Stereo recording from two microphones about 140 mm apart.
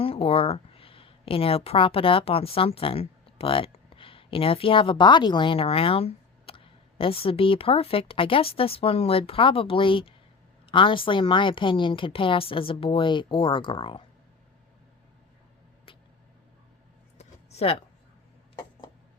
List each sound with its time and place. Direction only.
0.0 s a woman's voice: 40° left (ahead or behind)
15.9 s vehicle: 40° left (ahead or behind)
17.2 s a sound: 50° left (ahead or behind)